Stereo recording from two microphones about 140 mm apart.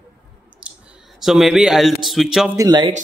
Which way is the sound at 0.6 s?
5° right (ahead or behind).